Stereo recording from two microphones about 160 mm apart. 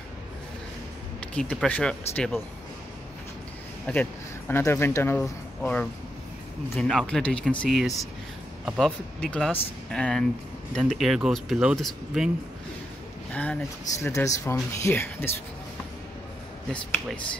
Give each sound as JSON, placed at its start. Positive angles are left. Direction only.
{"t": 1.3, "sound": "speech", "side_deg": 5}
{"t": 3.8, "sound": "speech", "side_deg": 10}
{"t": 13.3, "sound": "speech", "side_deg": 10}
{"t": 13.9, "sound": "speech", "side_deg": 20}
{"t": 16.6, "sound": "speech", "side_deg": 5}